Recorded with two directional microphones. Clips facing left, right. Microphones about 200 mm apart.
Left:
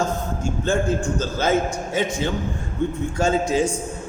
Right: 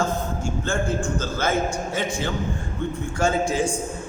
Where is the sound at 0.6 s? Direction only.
20° left (ahead or behind).